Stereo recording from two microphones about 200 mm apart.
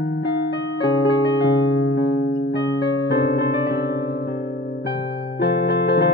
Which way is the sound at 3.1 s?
55° left (ahead or behind).